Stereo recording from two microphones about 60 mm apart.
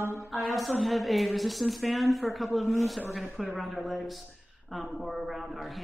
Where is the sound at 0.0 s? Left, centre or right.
Right.